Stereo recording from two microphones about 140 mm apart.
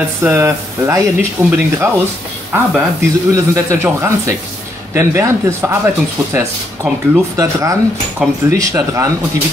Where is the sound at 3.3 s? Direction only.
20° right (ahead or behind).